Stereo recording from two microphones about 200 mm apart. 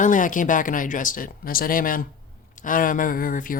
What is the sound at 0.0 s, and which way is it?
Speech, 40° left (ahead or behind).